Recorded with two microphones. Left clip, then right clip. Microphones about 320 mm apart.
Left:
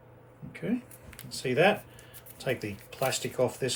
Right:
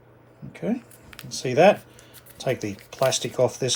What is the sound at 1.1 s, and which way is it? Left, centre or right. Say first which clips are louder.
Speech: right 6 dB; centre.